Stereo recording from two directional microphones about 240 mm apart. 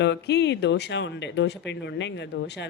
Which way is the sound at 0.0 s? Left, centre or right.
Left.